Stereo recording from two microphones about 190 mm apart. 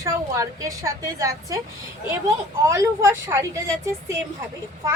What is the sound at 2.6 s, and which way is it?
A woman's voice, 15° right (ahead or behind).